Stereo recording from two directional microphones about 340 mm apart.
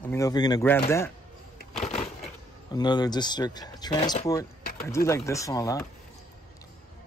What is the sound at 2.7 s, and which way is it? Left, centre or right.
Speech, centre.